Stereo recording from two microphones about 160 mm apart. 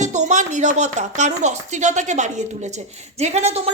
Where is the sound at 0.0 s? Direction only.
45° right (ahead or behind).